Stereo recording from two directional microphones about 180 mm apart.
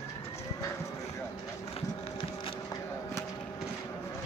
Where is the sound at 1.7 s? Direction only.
30° left (ahead or behind).